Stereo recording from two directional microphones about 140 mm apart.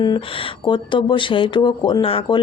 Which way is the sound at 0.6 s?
35° left (ahead or behind).